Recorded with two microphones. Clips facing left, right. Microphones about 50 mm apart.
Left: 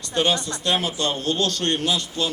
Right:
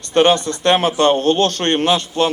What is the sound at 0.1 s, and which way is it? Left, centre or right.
A man's voice, right.